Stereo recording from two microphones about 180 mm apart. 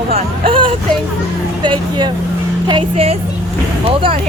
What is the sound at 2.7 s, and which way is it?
Speech, 30° right (ahead or behind).